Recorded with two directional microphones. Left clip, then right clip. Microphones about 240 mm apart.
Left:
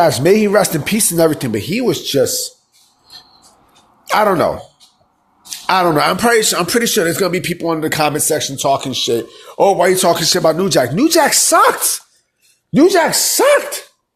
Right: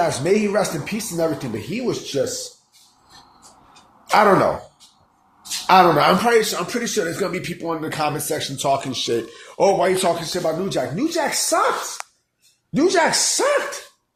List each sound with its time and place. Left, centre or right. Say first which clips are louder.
0.0 s speech: left 7 dB; left
4.0 s throat clearing: left 2 dB; left
5.6 s a man's voice: even; left
9.6 s a man's voice: left 5 dB; left
12.7 s a man's voice: left 6 dB; left